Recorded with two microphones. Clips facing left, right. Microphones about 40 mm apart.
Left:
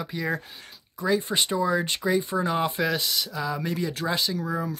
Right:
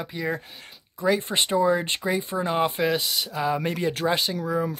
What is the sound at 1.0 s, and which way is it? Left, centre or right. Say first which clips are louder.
Speech: right 1 dB; right.